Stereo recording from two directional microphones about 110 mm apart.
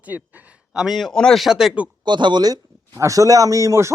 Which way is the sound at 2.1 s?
45° right (ahead or behind).